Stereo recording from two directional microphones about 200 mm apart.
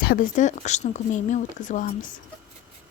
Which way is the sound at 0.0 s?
45° left (ahead or behind).